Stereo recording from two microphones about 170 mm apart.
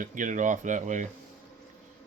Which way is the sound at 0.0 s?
50° right (ahead or behind).